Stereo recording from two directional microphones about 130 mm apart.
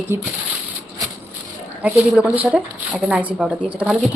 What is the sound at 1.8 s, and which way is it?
Speech, 10° right (ahead or behind).